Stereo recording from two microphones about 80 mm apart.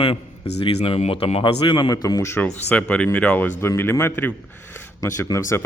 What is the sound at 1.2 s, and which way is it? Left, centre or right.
Speech, left.